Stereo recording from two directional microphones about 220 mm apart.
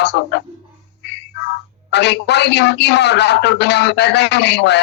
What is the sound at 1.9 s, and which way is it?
A man's voice, 50° left (ahead or behind).